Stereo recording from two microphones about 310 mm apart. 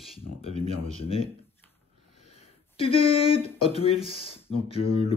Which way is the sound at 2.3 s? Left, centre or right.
Centre.